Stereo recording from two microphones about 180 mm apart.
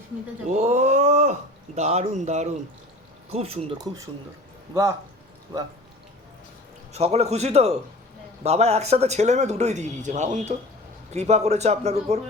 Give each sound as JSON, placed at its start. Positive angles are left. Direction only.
{"t": 0.4, "sound": "a sound", "side_deg": -40}
{"t": 3.2, "sound": "speech", "side_deg": -35}
{"t": 4.7, "sound": "speech", "side_deg": -15}
{"t": 6.9, "sound": "speech", "side_deg": -35}